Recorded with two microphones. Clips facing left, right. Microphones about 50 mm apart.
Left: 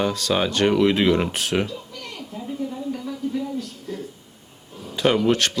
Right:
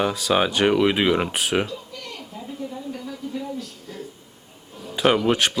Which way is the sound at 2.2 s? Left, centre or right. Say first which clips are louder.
Left 6 dB; centre.